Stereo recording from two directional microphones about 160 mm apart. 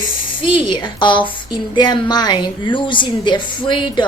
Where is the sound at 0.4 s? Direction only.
30° left (ahead or behind).